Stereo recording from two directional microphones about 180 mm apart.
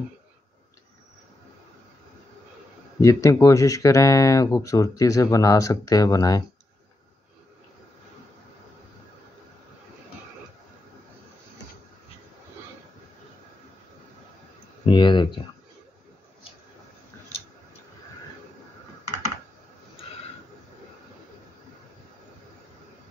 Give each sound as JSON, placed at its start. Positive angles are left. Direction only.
{"t": 3.0, "sound": "speech", "side_deg": 15}
{"t": 14.9, "sound": "speech", "side_deg": 25}